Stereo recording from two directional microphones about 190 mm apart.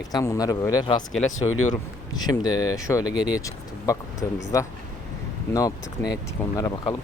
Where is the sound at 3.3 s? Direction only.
20° left (ahead or behind).